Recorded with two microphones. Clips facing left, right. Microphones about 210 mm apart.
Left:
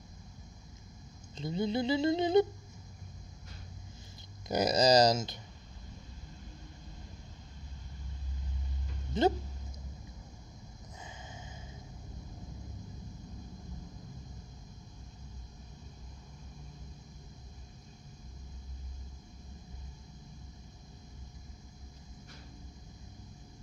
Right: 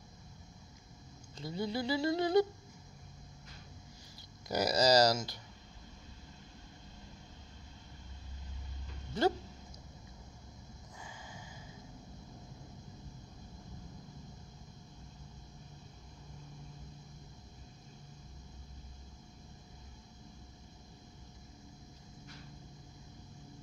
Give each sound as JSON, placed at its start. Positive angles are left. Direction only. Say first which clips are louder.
{"t": 1.3, "sound": "speech", "louder": "left 4 dB", "side_deg": 20}
{"t": 4.5, "sound": "speech", "louder": "left 3 dB", "side_deg": 20}
{"t": 9.1, "sound": "speech", "louder": "left 3 dB", "side_deg": 20}
{"t": 11.0, "sound": "a sound", "louder": "left 2 dB", "side_deg": 20}